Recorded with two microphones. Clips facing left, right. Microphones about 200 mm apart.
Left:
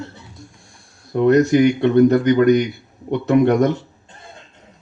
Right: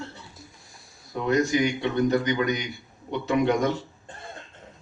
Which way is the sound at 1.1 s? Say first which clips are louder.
Left 10 dB; 60° left (ahead or behind).